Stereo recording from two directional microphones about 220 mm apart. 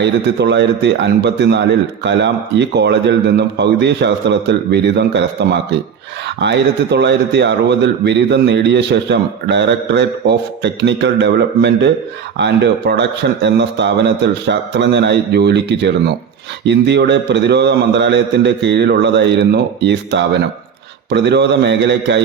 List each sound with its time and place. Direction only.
0.0 s a man's voice: 50° right (ahead or behind)
6.2 s a man's voice: 50° right (ahead or behind)